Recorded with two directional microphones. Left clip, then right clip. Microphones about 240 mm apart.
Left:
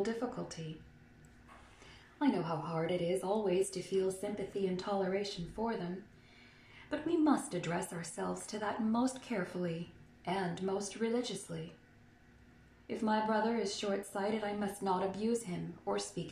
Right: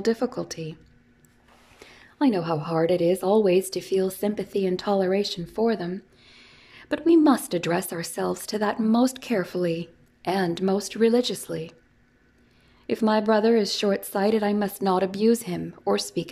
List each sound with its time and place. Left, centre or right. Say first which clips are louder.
0.1 s a woman's voice: right 13 dB; right
2.1 s a woman's voice: right 11 dB; right
12.8 s a woman's voice: right 12 dB; right